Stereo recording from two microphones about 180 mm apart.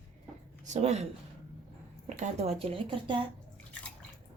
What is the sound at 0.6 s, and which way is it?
Speech, 40° right (ahead or behind).